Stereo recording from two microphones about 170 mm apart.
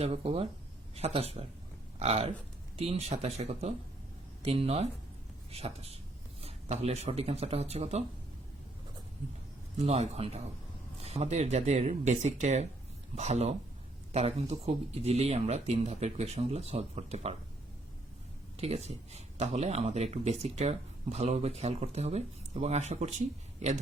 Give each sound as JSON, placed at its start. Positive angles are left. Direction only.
{"t": 0.0, "sound": "speech", "side_deg": -35}
{"t": 9.8, "sound": "speech", "side_deg": -40}
{"t": 18.5, "sound": "speech", "side_deg": -40}